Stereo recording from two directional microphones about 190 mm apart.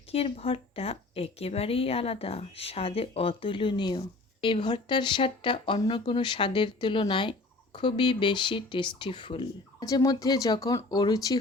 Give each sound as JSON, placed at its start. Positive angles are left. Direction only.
{"t": 0.1, "sound": "a woman's voice", "side_deg": 30}